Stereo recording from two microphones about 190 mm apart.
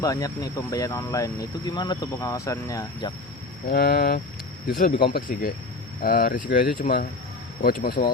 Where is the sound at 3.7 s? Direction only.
55° left (ahead or behind).